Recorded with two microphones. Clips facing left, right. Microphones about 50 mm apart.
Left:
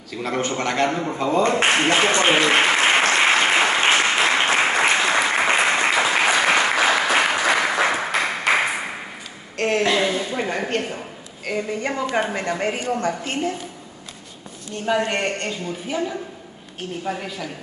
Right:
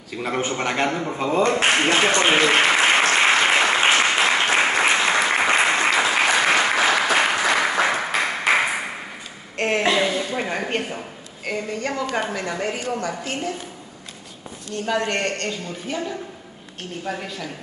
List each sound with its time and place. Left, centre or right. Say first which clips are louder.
0.1 s a man's voice: even; centre
0.8 s speech: left 1 dB; centre
1.1 s a man's voice: left 1 dB; centre
1.7 s speech: even; centre
2.7 s applause: even; centre
9.6 s a sound: even; right
10.0 s a sound: left 1 dB; centre
11.8 s a woman's voice: left 1 dB; centre
12.4 s a woman's voice: left 2 dB; left
14.9 s a woman's voice: left 2 dB; centre